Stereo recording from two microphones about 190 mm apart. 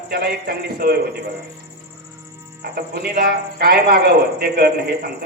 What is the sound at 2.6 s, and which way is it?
A man's voice, 55° right (ahead or behind).